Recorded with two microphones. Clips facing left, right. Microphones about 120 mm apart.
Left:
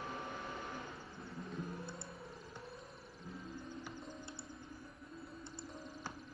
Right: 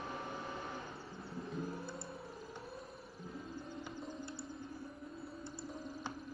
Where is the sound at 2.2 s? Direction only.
Centre (ahead or behind).